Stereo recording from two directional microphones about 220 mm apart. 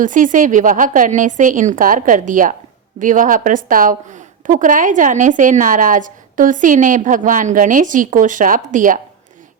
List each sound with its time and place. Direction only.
0.0 s a woman's voice: 35° right (ahead or behind)